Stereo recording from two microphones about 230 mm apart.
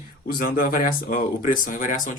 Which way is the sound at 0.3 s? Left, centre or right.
Left.